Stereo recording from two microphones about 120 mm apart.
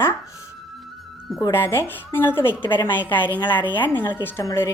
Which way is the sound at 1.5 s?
20° left (ahead or behind).